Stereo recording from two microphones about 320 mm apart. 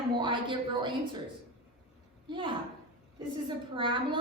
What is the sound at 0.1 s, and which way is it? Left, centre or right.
Speech, centre.